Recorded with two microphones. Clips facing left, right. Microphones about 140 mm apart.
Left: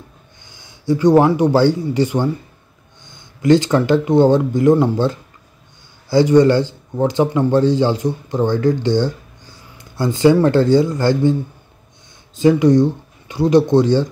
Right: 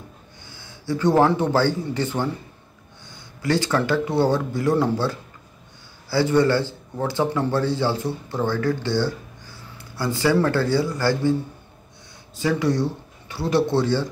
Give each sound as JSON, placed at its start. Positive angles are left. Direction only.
{"t": 0.5, "sound": "a man's voice", "side_deg": 15}
{"t": 12.4, "sound": "speech", "side_deg": 20}